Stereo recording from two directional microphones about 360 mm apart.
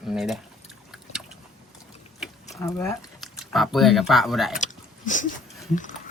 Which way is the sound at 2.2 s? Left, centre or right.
Centre.